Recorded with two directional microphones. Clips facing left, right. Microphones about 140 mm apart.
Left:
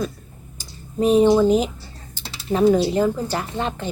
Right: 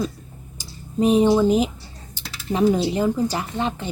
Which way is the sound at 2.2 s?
30° left (ahead or behind).